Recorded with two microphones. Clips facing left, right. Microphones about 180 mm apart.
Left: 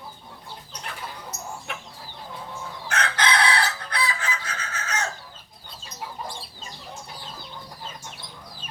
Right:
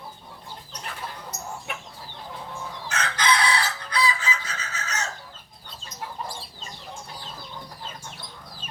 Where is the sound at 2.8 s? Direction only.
55° left (ahead or behind).